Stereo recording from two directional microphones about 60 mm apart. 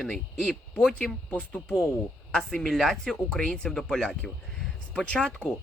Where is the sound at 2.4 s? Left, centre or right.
Centre.